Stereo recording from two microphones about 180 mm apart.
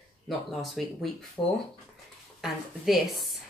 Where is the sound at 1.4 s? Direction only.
25° left (ahead or behind).